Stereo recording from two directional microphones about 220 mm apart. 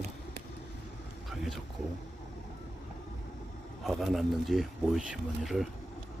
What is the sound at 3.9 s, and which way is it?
Speech, centre (ahead or behind).